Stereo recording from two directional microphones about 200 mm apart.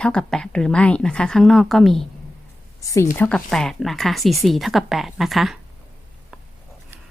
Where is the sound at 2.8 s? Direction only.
15° left (ahead or behind).